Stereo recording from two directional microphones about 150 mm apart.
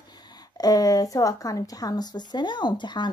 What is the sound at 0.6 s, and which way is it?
A woman's voice, 25° left (ahead or behind).